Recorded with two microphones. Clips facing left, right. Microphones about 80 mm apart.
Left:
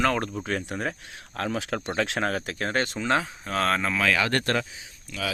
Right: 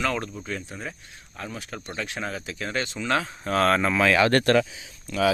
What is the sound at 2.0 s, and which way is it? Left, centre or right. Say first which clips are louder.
Speech: left 5 dB; left.